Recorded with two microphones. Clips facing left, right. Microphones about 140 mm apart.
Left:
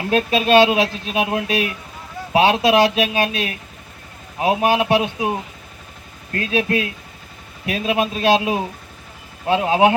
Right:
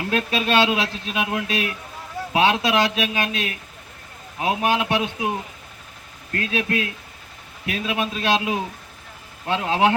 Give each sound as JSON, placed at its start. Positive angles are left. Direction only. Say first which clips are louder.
{"t": 0.1, "sound": "speech", "louder": "left 7 dB", "side_deg": 20}
{"t": 6.3, "sound": "speech", "louder": "left 4 dB", "side_deg": 25}